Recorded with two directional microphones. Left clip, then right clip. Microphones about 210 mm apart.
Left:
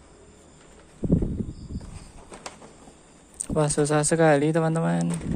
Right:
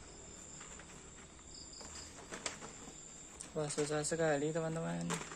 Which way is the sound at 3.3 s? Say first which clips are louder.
Left 15 dB; 45° left (ahead or behind).